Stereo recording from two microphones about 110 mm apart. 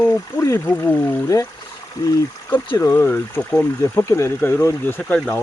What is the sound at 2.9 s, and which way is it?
Speech, 20° left (ahead or behind).